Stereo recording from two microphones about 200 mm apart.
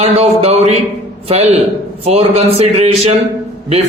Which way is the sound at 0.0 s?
30° right (ahead or behind).